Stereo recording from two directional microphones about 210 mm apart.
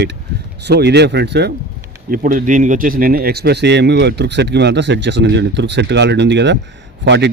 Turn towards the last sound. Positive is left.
turn(degrees=-55)  # may be behind; listen again after turning